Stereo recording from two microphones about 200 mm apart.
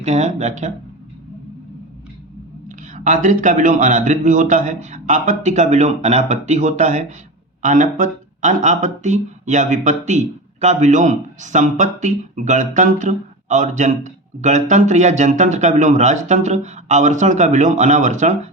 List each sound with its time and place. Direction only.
0.0 s speech: 35° right (ahead or behind)
2.6 s speech: 40° right (ahead or behind)